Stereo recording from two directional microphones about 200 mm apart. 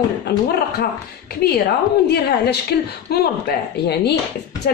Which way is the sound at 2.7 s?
55° left (ahead or behind).